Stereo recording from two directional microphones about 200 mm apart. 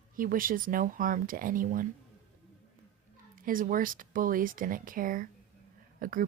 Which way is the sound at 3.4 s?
45° right (ahead or behind).